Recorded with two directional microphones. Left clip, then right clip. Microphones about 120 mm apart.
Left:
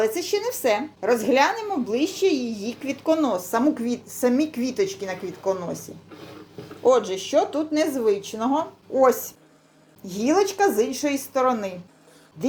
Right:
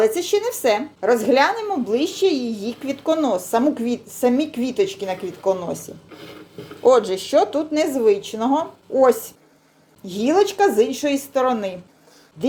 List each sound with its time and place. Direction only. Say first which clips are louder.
0.0 s speech: right 5 dB; 25° right (ahead or behind)